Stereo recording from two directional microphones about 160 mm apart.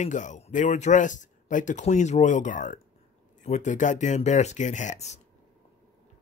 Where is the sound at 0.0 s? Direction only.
50° left (ahead or behind).